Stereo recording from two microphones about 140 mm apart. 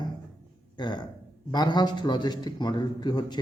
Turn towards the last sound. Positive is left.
turn(degrees=30)  # may be behind; listen again after turning